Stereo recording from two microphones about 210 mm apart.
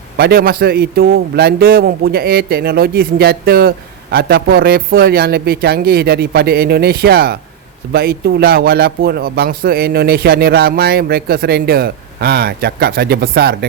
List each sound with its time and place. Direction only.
0.2 s a man's voice: 45° right (ahead or behind)